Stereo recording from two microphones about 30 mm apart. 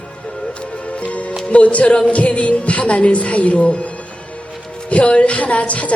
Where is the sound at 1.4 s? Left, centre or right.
Left.